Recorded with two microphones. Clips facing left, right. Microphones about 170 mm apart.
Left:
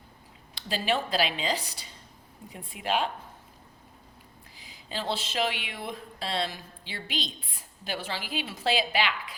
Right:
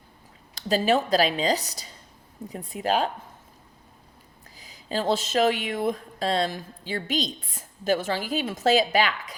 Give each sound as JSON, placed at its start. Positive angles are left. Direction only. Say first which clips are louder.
{"t": 0.5, "sound": "a woman's voice", "louder": "right 7 dB", "side_deg": -45}
{"t": 4.5, "sound": "speech", "louder": "right 8 dB", "side_deg": -40}